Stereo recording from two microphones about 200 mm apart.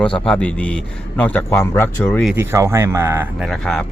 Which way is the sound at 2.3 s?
15° right (ahead or behind).